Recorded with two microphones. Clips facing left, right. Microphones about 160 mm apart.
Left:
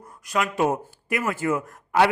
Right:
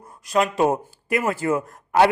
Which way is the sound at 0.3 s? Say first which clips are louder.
Right 3 dB; 30° right (ahead or behind).